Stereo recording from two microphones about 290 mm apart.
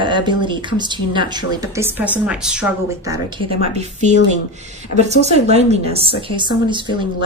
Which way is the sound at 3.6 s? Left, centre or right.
Right.